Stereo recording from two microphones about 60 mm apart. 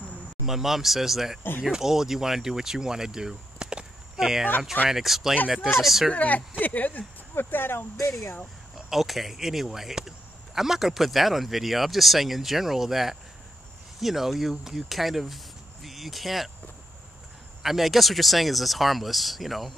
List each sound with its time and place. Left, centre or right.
0.5 s speech: centre
6.1 s speech: left
8.7 s speech: centre
17.6 s speech: centre